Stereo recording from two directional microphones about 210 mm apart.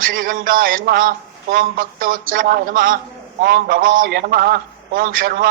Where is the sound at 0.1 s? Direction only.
40° right (ahead or behind).